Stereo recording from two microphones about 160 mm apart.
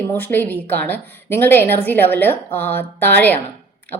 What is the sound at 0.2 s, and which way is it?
A woman's voice, 10° left (ahead or behind).